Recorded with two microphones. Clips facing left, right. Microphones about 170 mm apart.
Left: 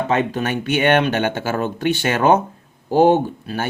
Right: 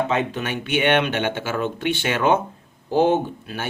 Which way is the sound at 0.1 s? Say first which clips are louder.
Left 4 dB; 45° left (ahead or behind).